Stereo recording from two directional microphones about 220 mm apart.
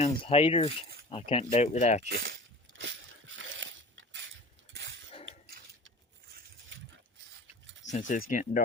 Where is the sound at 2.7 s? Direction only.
60° right (ahead or behind).